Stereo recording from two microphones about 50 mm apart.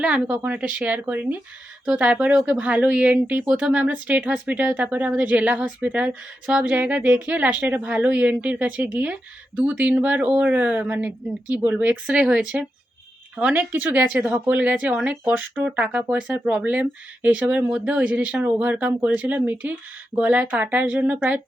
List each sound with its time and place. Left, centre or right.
0.0 s speech: right
13.4 s speech: right
15.2 s speech: right